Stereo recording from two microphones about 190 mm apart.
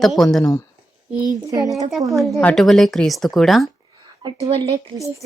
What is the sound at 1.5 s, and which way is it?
Child singing, 15° right (ahead or behind).